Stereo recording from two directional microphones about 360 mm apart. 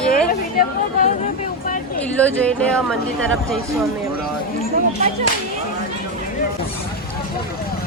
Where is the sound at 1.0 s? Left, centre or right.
Left.